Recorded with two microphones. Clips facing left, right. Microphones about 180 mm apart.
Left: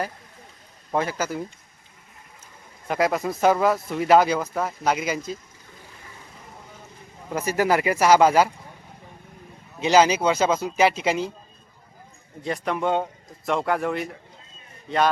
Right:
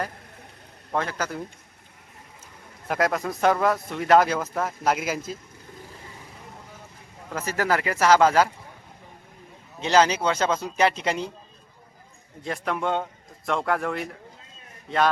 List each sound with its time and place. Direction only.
0.9 s speech: 10° left (ahead or behind)
2.8 s speech: centre (ahead or behind)
7.3 s speech: 10° left (ahead or behind)
9.8 s speech: 10° left (ahead or behind)
12.4 s a man's voice: centre (ahead or behind)